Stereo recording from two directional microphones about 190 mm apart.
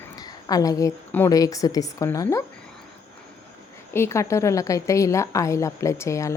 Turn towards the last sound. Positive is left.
turn(degrees=15)  # may be behind; listen again after turning